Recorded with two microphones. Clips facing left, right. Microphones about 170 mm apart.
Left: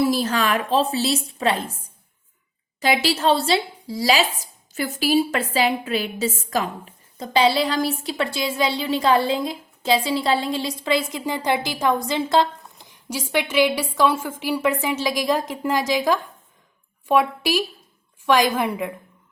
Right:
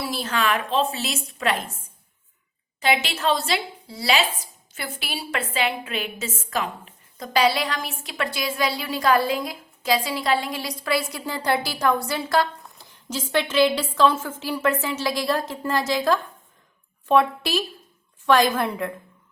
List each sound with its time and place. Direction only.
0.0 s a woman's voice: 40° left (ahead or behind)
2.8 s a woman's voice: 35° left (ahead or behind); by 18.9 s 15° left (ahead or behind)